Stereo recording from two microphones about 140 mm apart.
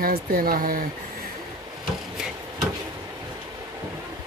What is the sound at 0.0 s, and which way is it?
Speech, 90° right.